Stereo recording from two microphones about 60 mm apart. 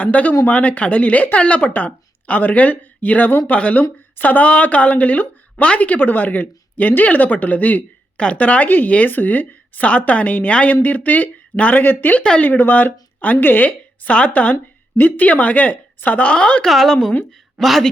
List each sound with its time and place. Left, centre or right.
0.0 s a woman's voice: left
16.6 s speech: centre